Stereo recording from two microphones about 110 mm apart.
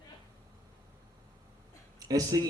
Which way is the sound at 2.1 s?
35° right (ahead or behind).